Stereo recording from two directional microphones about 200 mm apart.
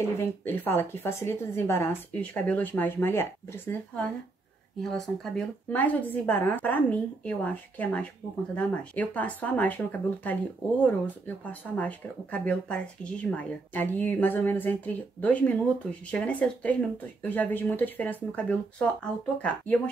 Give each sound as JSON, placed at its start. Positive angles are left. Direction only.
{"t": 0.5, "sound": "speech", "side_deg": 10}